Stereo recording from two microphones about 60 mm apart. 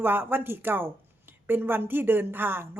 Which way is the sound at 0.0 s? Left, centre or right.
Right.